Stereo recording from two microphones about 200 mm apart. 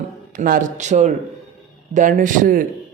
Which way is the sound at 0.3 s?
45° right (ahead or behind).